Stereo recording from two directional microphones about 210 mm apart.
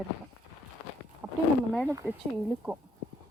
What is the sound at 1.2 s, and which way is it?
Wild animals, 5° right (ahead or behind).